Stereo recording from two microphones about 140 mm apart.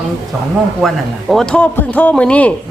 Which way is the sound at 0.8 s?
Centre (ahead or behind).